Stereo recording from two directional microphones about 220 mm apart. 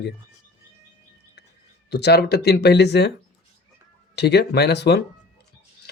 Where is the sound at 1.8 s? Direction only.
50° left (ahead or behind).